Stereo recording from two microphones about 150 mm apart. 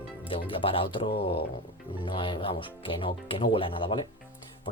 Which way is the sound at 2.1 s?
30° left (ahead or behind).